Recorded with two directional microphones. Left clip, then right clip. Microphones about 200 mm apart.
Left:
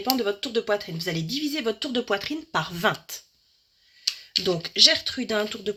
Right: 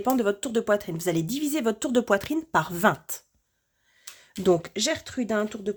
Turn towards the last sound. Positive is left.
turn(degrees=-25)  # may be behind; listen again after turning